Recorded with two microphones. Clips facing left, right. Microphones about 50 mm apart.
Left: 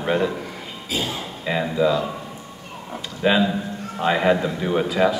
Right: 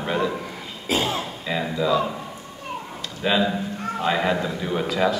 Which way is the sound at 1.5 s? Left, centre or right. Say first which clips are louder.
Left 3 dB; centre.